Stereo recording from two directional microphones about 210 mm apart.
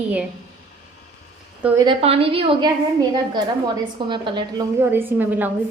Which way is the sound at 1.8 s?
25° right (ahead or behind).